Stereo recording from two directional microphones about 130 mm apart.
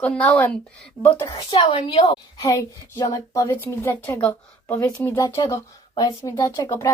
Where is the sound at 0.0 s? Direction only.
10° left (ahead or behind).